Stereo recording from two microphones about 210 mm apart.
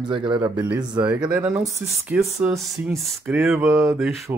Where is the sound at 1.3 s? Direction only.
5° right (ahead or behind).